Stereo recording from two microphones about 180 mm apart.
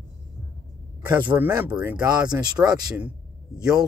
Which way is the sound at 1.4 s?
10° right (ahead or behind).